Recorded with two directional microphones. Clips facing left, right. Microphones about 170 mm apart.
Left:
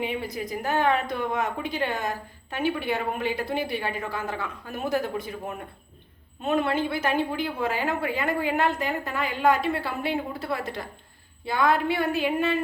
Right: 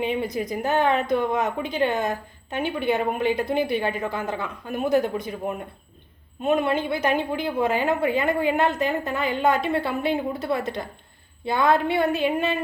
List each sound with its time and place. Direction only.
0.0 s speech: 20° right (ahead or behind)